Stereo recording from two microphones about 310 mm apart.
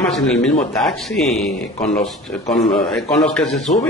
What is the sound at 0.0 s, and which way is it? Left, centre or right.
A man's voice, centre.